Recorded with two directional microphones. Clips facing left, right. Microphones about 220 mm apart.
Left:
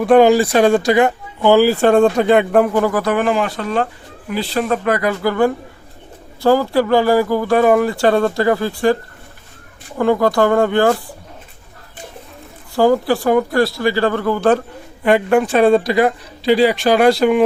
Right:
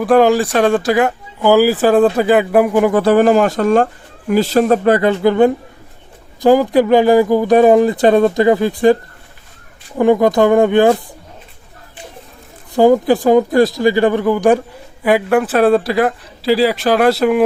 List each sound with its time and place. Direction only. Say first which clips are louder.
0.0 s speech: left 1 dB; centre (ahead or behind)
2.9 s speech: right 6 dB; 30° right (ahead or behind)
10.0 s speech: right 3 dB; 20° right (ahead or behind)
12.7 s speech: right 3 dB; 20° right (ahead or behind)